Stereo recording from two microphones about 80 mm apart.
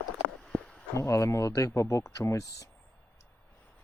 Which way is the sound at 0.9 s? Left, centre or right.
Left.